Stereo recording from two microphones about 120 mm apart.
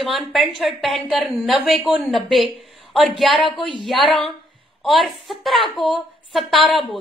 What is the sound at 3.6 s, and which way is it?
Speech, 45° left (ahead or behind).